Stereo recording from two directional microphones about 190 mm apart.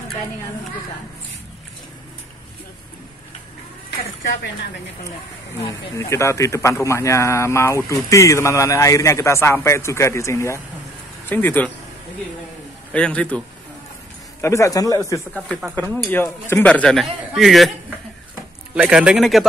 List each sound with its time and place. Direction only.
5.7 s speech: 15° left (ahead or behind)
12.9 s speech: 5° left (ahead or behind)
14.4 s speech: 15° left (ahead or behind)
15.3 s speech: 5° left (ahead or behind)